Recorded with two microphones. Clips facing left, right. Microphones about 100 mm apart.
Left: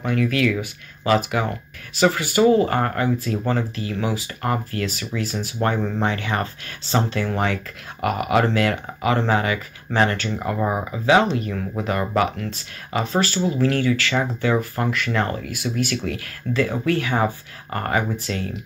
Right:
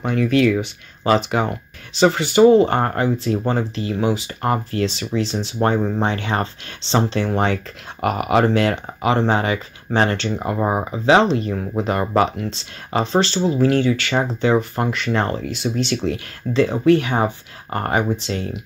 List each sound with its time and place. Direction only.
0.0 s speech: 25° right (ahead or behind)